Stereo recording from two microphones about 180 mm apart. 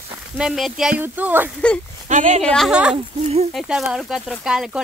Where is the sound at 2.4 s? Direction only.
5° left (ahead or behind).